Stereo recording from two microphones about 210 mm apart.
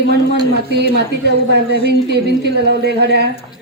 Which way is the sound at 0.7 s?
50° right (ahead or behind).